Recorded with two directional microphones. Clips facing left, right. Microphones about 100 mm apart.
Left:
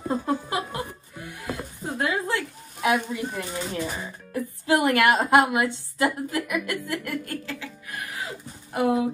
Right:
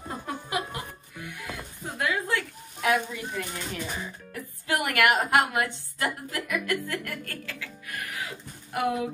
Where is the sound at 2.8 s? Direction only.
15° left (ahead or behind).